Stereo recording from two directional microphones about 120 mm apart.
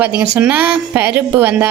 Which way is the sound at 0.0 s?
10° right (ahead or behind).